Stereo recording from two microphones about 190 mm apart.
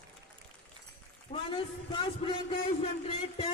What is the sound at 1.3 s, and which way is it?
A man's voice, 30° left (ahead or behind).